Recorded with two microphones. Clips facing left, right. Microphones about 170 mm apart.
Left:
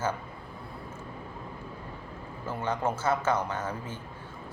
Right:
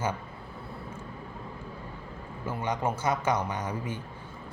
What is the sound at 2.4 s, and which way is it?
A man's voice, 10° right (ahead or behind).